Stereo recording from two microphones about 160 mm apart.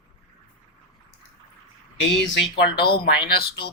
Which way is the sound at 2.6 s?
80° left.